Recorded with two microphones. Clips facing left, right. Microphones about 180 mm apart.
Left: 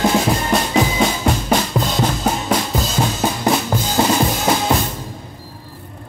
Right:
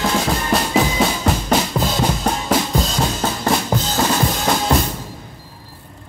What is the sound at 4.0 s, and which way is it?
Drum, 20° left (ahead or behind).